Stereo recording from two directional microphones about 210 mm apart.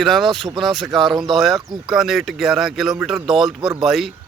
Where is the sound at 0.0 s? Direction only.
Centre (ahead or behind).